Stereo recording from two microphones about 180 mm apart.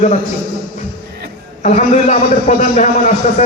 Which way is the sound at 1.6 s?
40° left (ahead or behind).